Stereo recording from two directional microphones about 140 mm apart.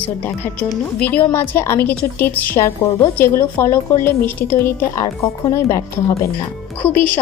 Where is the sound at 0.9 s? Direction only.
10° left (ahead or behind).